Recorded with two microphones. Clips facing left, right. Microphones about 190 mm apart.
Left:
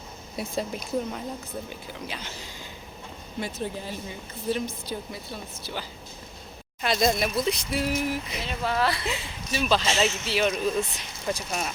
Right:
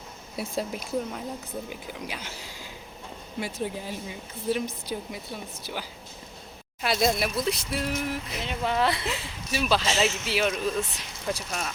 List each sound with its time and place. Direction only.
0.3 s speech: 5° right (ahead or behind)
6.8 s speech: 5° right (ahead or behind)
7.8 s a sound: 5° left (ahead or behind)
8.4 s speech: 20° right (ahead or behind)
9.0 s speech: 5° right (ahead or behind)